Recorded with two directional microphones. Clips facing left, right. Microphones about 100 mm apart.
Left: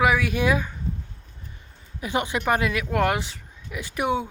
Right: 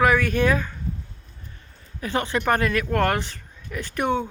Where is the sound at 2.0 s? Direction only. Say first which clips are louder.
Right 1 dB; 15° left (ahead or behind).